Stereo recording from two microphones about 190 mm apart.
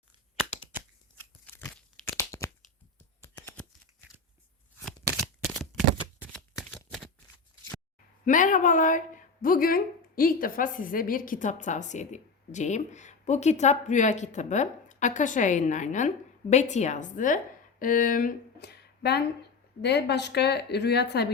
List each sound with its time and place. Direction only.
1.5 s tearing: 10° left (ahead or behind)
4.8 s shuffling cards: 5° left (ahead or behind)
8.2 s speech: 45° left (ahead or behind); by 21.2 s 60° left (ahead or behind)